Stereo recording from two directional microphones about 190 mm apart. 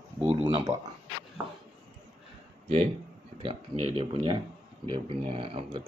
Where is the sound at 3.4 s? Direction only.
30° right (ahead or behind).